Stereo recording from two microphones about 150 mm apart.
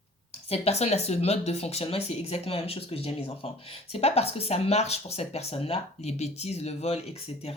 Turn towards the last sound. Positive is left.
turn(degrees=45)  # may be behind; listen again after turning